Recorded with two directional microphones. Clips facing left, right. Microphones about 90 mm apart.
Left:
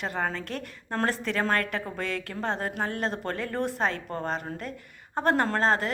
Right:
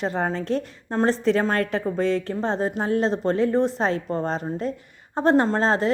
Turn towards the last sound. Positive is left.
turn(degrees=-30)  # may be behind; listen again after turning